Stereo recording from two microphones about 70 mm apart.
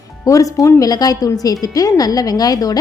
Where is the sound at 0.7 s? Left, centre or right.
Left.